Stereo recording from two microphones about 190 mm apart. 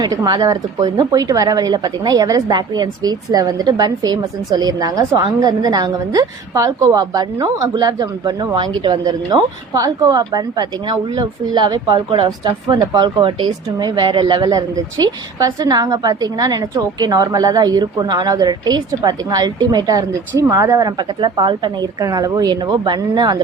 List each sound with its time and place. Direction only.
0.0 s speech: 20° right (ahead or behind)